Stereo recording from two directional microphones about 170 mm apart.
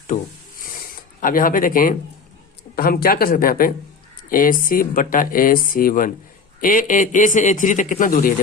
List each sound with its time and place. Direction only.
1.2 s a woman's voice: 55° left (ahead or behind)
4.2 s a sound: 55° left (ahead or behind)
4.6 s a woman's voice: 55° left (ahead or behind)